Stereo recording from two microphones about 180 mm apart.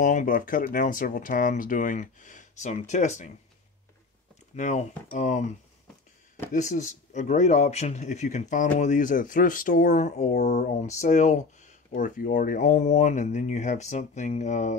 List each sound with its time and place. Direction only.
0.0 s speech: 45° left (ahead or behind)
4.6 s speech: 40° left (ahead or behind)
6.5 s speech: 45° left (ahead or behind)